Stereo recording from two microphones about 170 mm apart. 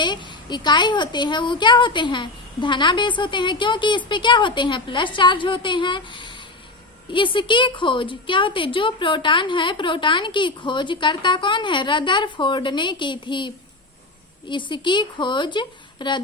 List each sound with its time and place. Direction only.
0.0 s a woman's voice: 25° left (ahead or behind)
14.5 s a woman's voice: 30° left (ahead or behind)